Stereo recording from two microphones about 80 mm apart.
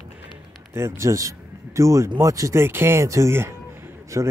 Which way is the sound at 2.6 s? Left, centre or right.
Right.